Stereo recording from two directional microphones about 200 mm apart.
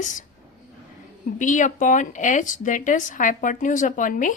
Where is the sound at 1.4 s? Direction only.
40° left (ahead or behind).